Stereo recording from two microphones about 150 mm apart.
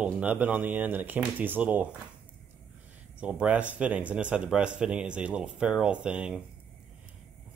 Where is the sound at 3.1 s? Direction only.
10° right (ahead or behind).